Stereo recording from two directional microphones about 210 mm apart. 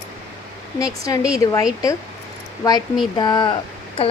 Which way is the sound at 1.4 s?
15° left (ahead or behind).